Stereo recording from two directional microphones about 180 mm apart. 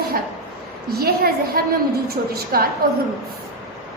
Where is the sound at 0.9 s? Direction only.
60° right (ahead or behind).